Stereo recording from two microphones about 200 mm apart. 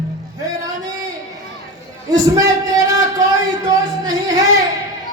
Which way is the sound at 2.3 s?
15° right (ahead or behind).